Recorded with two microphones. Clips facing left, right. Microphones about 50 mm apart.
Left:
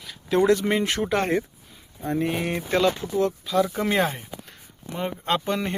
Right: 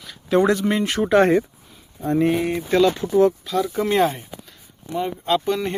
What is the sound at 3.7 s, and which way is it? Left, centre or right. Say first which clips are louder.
Speech: right 4 dB; centre.